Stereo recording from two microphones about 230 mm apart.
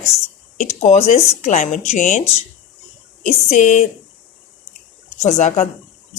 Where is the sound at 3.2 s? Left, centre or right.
Left.